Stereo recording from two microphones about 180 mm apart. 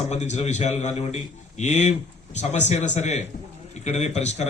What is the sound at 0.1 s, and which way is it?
A man's voice, 40° left (ahead or behind).